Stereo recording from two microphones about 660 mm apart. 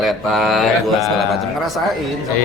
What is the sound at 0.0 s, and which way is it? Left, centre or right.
A man's voice, centre.